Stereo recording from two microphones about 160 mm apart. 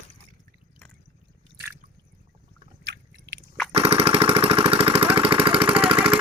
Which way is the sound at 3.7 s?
40° right (ahead or behind).